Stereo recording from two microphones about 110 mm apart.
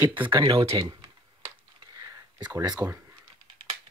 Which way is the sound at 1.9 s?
35° right (ahead or behind).